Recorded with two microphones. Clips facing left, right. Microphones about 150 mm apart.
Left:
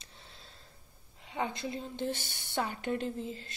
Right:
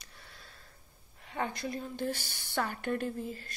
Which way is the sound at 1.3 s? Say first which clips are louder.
Even; 20° left (ahead or behind).